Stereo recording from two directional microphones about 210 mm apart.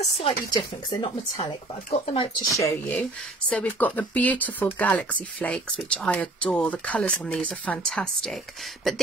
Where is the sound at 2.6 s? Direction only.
10° left (ahead or behind).